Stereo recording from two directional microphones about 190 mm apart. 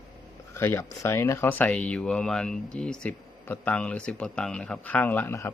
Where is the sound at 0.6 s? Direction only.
10° left (ahead or behind).